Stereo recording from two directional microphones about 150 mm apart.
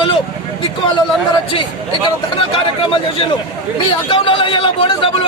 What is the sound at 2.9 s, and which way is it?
A man's voice, 35° left (ahead or behind).